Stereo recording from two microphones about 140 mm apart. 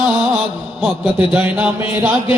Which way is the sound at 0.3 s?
35° left (ahead or behind).